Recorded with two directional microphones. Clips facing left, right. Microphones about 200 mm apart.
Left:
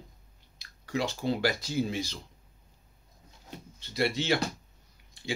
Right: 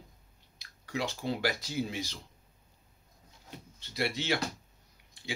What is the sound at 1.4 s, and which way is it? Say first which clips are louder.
Speech: left 4 dB; 15° right (ahead or behind).